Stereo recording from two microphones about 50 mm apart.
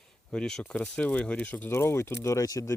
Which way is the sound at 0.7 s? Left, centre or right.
Left.